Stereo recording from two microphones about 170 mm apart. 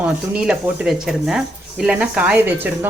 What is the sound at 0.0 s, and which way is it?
Speech, 5° right (ahead or behind).